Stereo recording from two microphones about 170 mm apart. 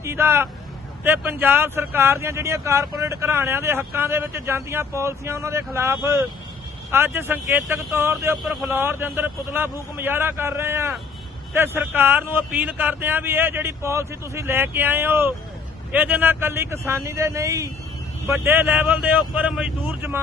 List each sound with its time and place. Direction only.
0.0 s a man's voice: 15° right (ahead or behind)
8.4 s speech: centre (ahead or behind)
8.7 s a man's voice: 10° right (ahead or behind)